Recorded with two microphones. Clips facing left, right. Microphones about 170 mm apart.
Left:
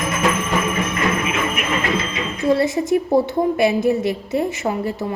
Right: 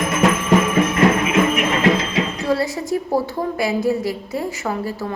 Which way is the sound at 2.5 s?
20° left (ahead or behind).